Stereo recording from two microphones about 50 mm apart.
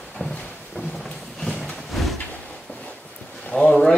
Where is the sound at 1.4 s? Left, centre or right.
Centre.